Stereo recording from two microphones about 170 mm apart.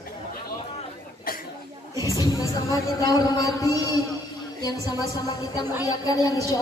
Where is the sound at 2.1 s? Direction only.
20° left (ahead or behind).